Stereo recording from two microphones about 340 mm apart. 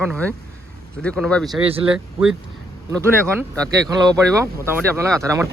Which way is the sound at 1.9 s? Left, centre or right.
Centre.